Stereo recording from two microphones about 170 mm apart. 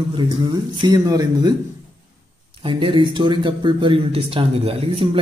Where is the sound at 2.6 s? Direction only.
30° right (ahead or behind).